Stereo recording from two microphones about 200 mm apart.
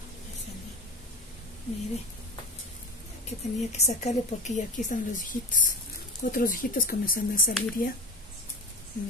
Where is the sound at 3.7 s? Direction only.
35° left (ahead or behind).